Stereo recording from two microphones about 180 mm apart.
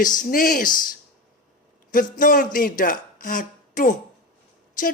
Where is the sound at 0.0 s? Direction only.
45° left (ahead or behind).